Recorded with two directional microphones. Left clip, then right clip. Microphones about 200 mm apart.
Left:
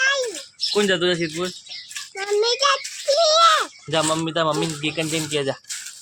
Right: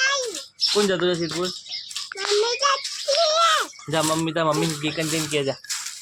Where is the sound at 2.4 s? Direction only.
15° left (ahead or behind).